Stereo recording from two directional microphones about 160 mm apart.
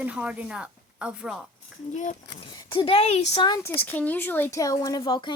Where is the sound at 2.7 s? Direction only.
35° left (ahead or behind).